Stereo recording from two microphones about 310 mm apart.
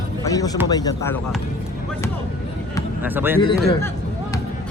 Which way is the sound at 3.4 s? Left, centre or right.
Centre.